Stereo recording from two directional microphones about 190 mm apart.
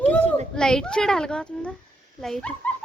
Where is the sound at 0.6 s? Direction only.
5° left (ahead or behind).